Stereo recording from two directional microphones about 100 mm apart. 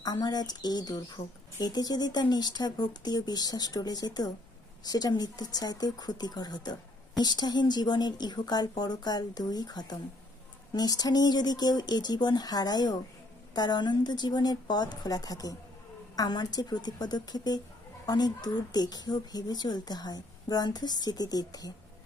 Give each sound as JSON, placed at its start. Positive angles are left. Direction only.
{"t": 0.0, "sound": "a woman's voice", "side_deg": 40}